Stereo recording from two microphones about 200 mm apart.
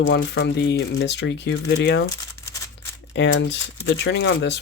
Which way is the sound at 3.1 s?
60° left (ahead or behind).